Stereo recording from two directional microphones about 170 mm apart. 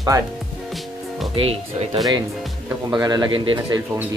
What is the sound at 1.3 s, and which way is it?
Speech, 35° right (ahead or behind).